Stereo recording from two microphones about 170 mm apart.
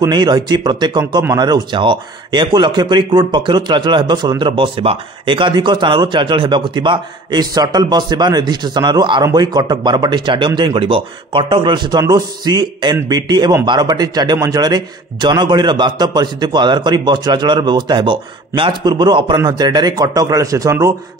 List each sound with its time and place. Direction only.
0.0 s speech: 25° right (ahead or behind)